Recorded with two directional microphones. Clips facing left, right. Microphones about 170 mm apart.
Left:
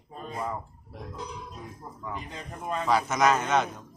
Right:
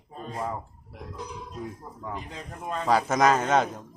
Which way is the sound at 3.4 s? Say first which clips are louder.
Right 3 dB; 30° right (ahead or behind).